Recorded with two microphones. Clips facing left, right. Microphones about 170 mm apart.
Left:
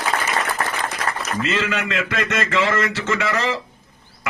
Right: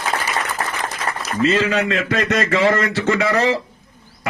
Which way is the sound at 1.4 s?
40° right (ahead or behind).